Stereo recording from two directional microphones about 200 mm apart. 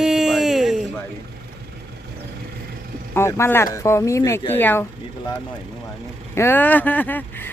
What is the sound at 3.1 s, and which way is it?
Speech, 15° left (ahead or behind).